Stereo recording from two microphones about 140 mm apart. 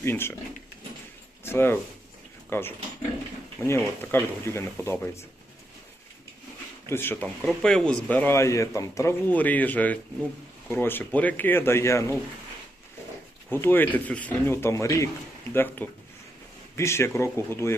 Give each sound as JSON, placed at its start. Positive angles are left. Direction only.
{"t": 0.0, "sound": "a man's voice", "side_deg": 15}
{"t": 1.5, "sound": "a man's voice", "side_deg": 15}
{"t": 6.8, "sound": "a man's voice", "side_deg": 15}
{"t": 7.4, "sound": "a man's voice", "side_deg": 5}
{"t": 13.5, "sound": "a man's voice", "side_deg": 15}